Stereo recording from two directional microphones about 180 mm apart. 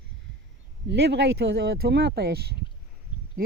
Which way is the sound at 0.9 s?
70° right (ahead or behind).